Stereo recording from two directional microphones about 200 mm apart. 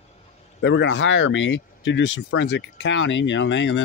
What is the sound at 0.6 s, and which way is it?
Speech, 65° left (ahead or behind).